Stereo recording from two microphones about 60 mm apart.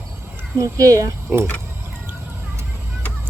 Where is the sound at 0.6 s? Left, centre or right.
Right.